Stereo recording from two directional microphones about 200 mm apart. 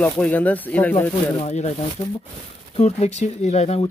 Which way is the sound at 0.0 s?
10° left (ahead or behind).